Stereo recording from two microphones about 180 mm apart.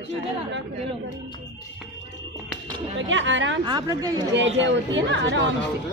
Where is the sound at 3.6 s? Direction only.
20° right (ahead or behind).